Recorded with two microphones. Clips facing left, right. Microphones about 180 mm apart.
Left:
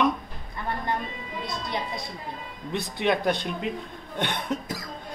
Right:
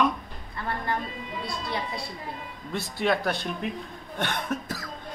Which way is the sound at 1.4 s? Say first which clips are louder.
Left 1 dB; 20° left (ahead or behind).